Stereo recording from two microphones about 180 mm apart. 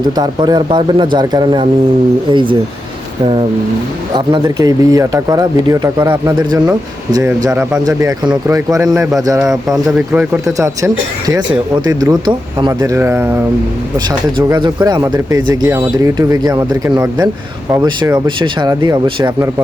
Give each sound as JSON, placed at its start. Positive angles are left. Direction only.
{"t": 0.2, "sound": "speech", "side_deg": -25}
{"t": 4.1, "sound": "speech", "side_deg": -20}
{"t": 10.1, "sound": "speech", "side_deg": -15}
{"t": 14.3, "sound": "speech", "side_deg": -25}